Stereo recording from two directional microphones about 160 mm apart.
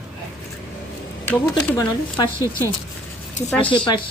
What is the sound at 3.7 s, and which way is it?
Speech, 30° left (ahead or behind).